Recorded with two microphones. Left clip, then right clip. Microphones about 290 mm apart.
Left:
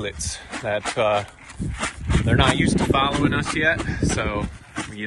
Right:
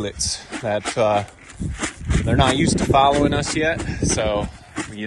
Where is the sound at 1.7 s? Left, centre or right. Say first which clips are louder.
Even; centre.